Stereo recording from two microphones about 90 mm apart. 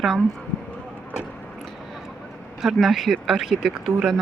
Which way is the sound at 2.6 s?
Centre (ahead or behind).